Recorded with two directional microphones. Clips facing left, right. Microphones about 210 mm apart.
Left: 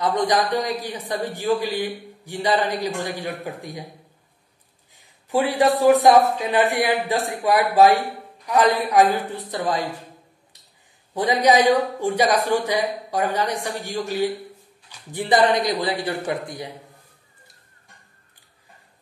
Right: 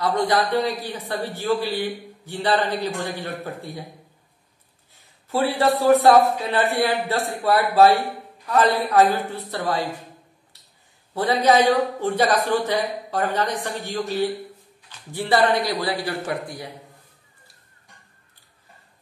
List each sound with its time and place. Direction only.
0.0 s speech: 15° left (ahead or behind)
4.9 s a man's voice: 15° left (ahead or behind)
11.1 s speech: 15° left (ahead or behind)